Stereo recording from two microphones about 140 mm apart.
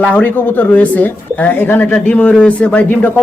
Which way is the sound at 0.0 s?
10° left (ahead or behind).